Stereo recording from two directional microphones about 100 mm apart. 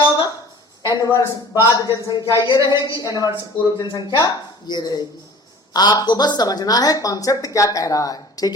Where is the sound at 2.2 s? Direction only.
45° left (ahead or behind).